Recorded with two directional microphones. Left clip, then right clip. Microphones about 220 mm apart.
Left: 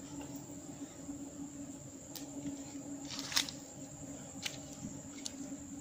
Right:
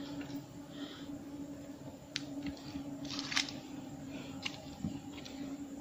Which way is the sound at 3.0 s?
20° right (ahead or behind).